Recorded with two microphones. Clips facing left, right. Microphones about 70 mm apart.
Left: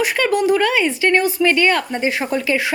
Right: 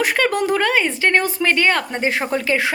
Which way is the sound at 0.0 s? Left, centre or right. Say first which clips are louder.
Left 1 dB; right.